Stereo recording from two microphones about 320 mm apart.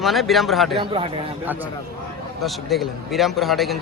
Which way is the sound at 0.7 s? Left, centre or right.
Centre.